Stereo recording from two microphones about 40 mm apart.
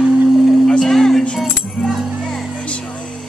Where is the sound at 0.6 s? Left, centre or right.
Centre.